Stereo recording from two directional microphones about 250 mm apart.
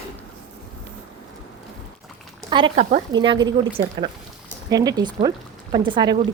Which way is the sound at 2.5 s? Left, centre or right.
Right.